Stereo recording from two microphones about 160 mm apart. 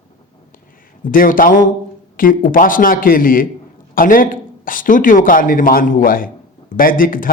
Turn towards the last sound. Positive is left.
turn(degrees=60)  # may be behind; listen again after turning